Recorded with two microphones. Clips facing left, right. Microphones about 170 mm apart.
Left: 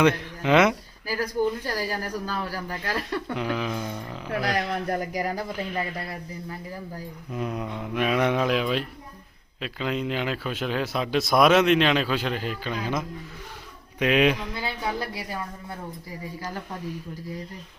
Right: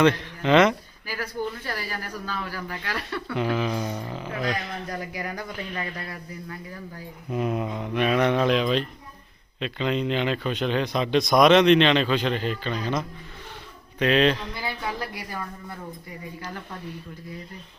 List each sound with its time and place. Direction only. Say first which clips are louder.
0.0 s speech: right 1 dB; 10° left (ahead or behind)
1.0 s speech: left 5 dB; 40° left (ahead or behind)
3.3 s speech: right 5 dB; centre (ahead or behind)
4.3 s speech: left 4 dB; 70° left (ahead or behind)
4.9 s speech: left 4 dB; 35° left (ahead or behind)
7.3 s speech: right 4 dB; 10° right (ahead or behind); by 14.5 s 10° left (ahead or behind)
14.6 s a woman's voice: left 1 dB; 25° left (ahead or behind)